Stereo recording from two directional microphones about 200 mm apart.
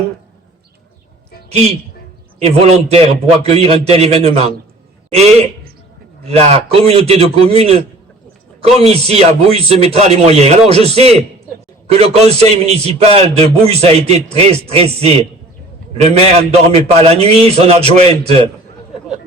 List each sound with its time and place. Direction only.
1.5 s a woman's voice: 30° right (ahead or behind)